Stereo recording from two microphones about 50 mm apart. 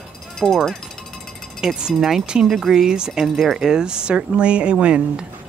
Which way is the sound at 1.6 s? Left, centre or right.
Centre.